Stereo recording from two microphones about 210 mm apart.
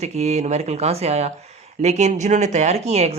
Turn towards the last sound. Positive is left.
turn(degrees=-30)  # may be behind; listen again after turning